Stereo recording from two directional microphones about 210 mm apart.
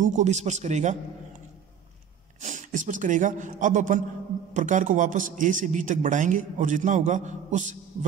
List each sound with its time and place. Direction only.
0.0 s a man's voice: 35° right (ahead or behind)
2.4 s a man's voice: 35° right (ahead or behind)